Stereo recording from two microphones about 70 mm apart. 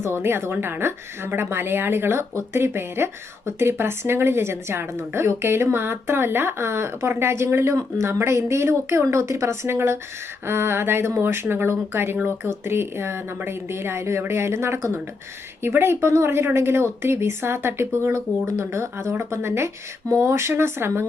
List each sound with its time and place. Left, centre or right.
0.0 s a woman's voice: right